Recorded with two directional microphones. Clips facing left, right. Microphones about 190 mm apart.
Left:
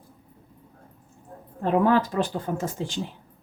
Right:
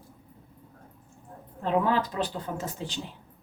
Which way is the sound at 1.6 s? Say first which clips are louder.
Left 5 dB; 50° left (ahead or behind).